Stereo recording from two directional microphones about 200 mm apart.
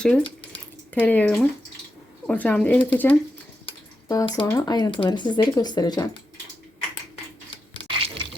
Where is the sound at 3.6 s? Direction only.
20° left (ahead or behind).